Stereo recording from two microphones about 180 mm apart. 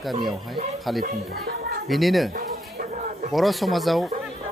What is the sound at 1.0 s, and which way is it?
Speech, 60° right (ahead or behind).